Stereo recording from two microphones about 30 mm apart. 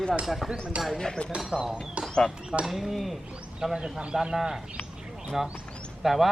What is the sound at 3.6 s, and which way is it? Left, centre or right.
Speech, right.